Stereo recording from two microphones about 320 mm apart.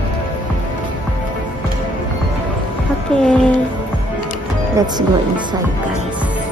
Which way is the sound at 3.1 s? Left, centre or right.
Centre.